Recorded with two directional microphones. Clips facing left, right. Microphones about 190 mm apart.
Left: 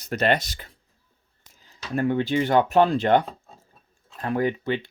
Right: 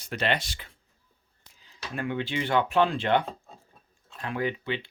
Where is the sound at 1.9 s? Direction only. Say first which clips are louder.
Left 8 dB; 40° left (ahead or behind).